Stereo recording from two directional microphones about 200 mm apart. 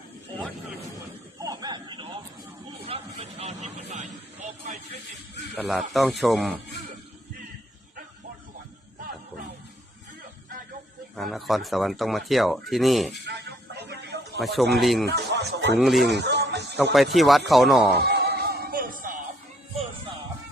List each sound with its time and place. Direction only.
1.4 s a sound: 20° right (ahead or behind)
2.8 s vehicle: 30° right (ahead or behind)
4.4 s music: 35° right (ahead or behind)
5.5 s speech: centre (ahead or behind)
11.2 s speech: centre (ahead or behind)
13.2 s a sound: 55° right (ahead or behind)
14.3 s speech: centre (ahead or behind)
15.0 s speech: 55° right (ahead or behind)
15.8 s speech: centre (ahead or behind)
16.0 s music: 55° right (ahead or behind)
16.9 s speech: centre (ahead or behind)
17.9 s music: 55° right (ahead or behind)